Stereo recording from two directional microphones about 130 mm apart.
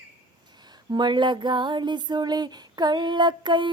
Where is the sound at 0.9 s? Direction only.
35° right (ahead or behind).